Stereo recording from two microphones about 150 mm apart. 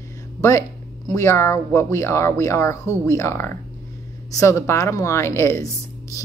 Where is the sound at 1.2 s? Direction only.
15° left (ahead or behind).